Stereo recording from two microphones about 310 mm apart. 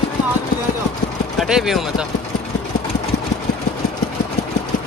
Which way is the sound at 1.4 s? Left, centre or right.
Centre.